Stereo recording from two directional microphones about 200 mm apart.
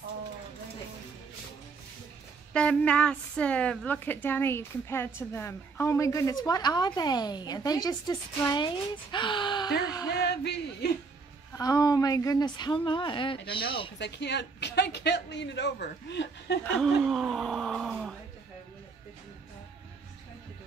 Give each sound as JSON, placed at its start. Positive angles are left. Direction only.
{"t": 2.5, "sound": "a woman's voice", "side_deg": 5}
{"t": 10.2, "sound": "a man's voice", "side_deg": 55}
{"t": 11.5, "sound": "speech", "side_deg": 15}
{"t": 13.9, "sound": "a man's voice", "side_deg": 60}
{"t": 16.6, "sound": "speech", "side_deg": 0}